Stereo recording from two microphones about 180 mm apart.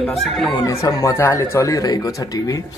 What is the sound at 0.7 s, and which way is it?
Speech, 20° left (ahead or behind).